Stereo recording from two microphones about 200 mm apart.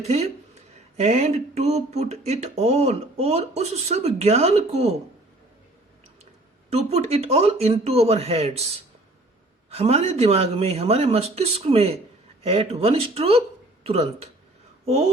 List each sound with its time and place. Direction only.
0.9 s speech: 35° right (ahead or behind)
6.7 s speech: 30° right (ahead or behind)
14.8 s a sound: 30° right (ahead or behind)